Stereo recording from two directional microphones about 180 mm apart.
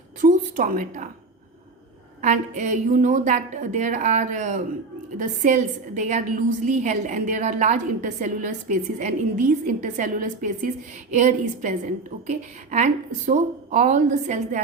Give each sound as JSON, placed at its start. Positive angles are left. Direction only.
{"t": 0.2, "sound": "a woman's voice", "side_deg": -45}
{"t": 2.2, "sound": "a woman's voice", "side_deg": -40}